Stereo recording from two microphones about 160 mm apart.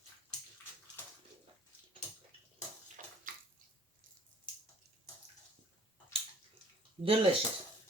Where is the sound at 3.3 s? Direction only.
60° right (ahead or behind).